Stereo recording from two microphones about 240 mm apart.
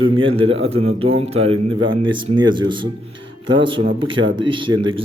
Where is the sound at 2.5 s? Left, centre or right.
Centre.